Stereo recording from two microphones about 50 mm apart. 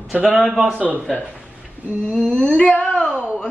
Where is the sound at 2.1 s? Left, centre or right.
Centre.